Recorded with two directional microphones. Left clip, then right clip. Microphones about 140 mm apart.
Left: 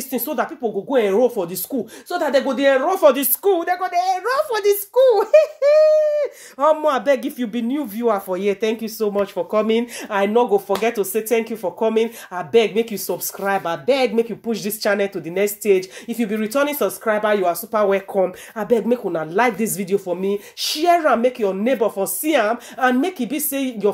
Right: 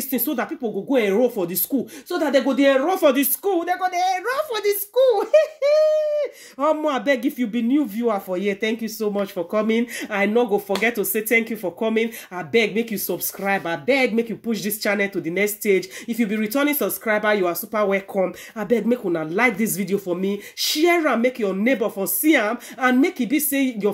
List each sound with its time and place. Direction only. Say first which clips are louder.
0.1 s speech: left 2 dB; 25° left (ahead or behind)
3.5 s speech: left 2 dB; 40° left (ahead or behind)
7.7 s speech: left 2 dB; 40° left (ahead or behind)